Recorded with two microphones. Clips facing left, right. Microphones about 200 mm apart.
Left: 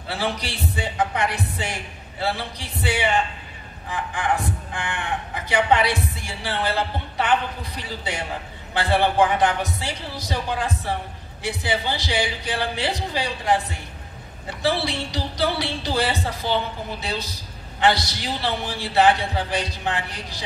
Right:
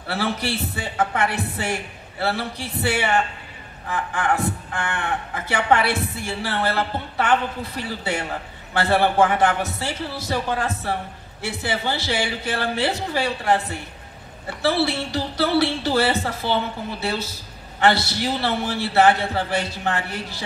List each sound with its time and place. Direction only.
0.1 s a man's voice: 15° left (ahead or behind)